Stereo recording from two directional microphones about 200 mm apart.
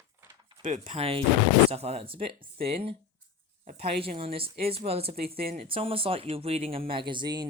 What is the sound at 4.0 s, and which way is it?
Speech, 30° right (ahead or behind).